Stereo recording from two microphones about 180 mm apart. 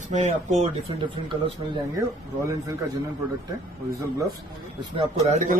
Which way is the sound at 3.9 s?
15° right (ahead or behind).